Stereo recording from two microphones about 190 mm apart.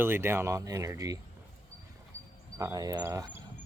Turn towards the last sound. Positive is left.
turn(degrees=-20)  # may be behind; listen again after turning